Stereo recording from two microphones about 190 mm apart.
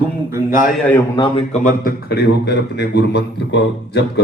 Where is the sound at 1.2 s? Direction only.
30° left (ahead or behind).